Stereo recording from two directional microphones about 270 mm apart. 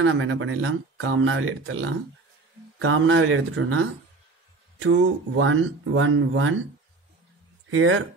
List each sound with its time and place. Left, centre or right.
0.0 s speech: right
7.7 s speech: right